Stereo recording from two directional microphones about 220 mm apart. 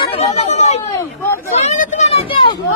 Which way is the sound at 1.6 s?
30° left (ahead or behind).